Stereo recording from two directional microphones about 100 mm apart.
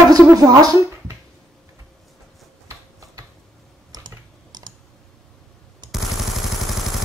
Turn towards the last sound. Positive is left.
turn(degrees=0)  # may be behind; listen again after turning